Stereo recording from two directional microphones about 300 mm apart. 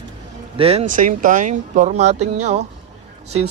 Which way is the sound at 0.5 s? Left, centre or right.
Centre.